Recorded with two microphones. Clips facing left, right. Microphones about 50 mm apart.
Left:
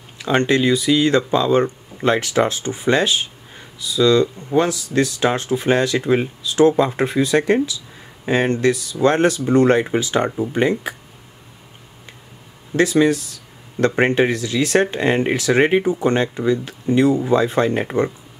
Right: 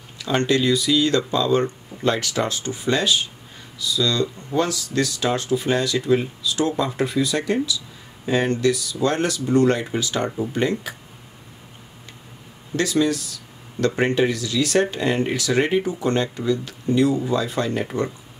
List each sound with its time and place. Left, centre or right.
0.2 s speech: left
12.7 s speech: left